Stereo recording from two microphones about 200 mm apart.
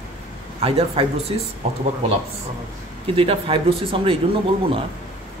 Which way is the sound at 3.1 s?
25° right (ahead or behind).